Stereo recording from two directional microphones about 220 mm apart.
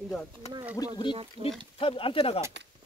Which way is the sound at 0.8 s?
15° left (ahead or behind).